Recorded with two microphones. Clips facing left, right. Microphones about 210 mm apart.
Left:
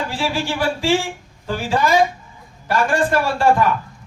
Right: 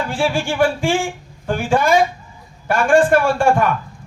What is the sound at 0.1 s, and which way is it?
A man's voice, 50° right (ahead or behind).